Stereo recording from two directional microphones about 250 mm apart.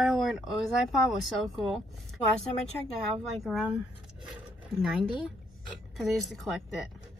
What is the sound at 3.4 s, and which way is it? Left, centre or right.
Speech, centre.